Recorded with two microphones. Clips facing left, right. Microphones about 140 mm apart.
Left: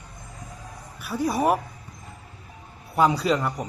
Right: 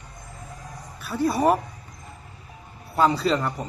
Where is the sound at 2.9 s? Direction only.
15° left (ahead or behind).